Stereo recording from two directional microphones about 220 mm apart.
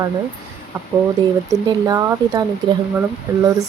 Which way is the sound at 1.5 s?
15° right (ahead or behind).